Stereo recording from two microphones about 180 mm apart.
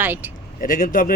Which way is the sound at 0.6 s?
45° left (ahead or behind).